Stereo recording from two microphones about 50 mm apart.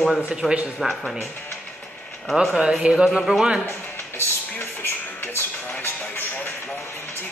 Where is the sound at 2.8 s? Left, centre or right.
Right.